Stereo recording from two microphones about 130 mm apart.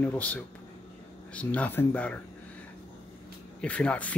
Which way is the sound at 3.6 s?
10° left (ahead or behind).